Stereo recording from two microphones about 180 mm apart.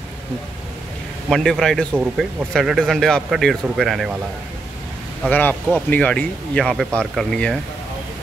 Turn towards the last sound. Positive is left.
turn(degrees=5)  # may be behind; listen again after turning